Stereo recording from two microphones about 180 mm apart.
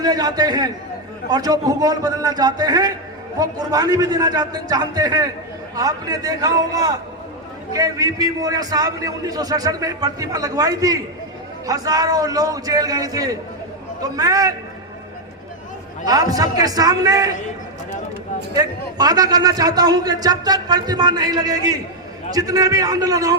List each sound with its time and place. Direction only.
0.0 s a man's voice: 20° right (ahead or behind)
16.0 s a man's voice: 20° right (ahead or behind)
18.5 s a man's voice: 20° right (ahead or behind)